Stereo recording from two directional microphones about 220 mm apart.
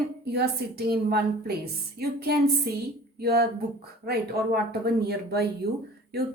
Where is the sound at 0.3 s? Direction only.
45° right (ahead or behind).